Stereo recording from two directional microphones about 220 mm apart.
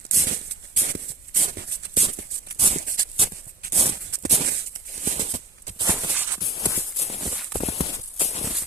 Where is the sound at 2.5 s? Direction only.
30° right (ahead or behind).